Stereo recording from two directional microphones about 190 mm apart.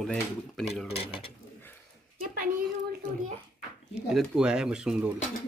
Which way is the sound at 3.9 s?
Centre (ahead or behind).